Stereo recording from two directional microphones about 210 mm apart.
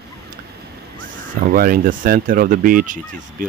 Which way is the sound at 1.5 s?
40° right (ahead or behind).